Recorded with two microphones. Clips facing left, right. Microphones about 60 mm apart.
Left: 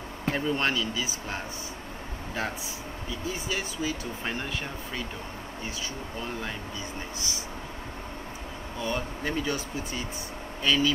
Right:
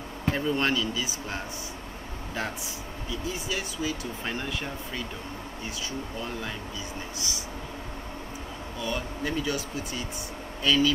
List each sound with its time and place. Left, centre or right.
0.3 s speech: centre
0.7 s speech: left
3.1 s speech: left
4.2 s speech: centre
8.7 s speech: left